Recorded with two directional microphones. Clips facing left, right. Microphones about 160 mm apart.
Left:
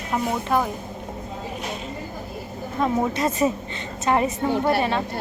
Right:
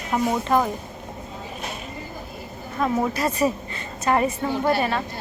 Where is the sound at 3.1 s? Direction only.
20° left (ahead or behind).